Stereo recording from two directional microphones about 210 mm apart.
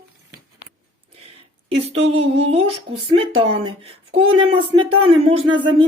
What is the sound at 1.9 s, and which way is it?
Speech, 30° right (ahead or behind).